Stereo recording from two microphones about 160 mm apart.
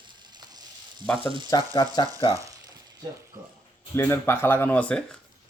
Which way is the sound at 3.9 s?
15° left (ahead or behind).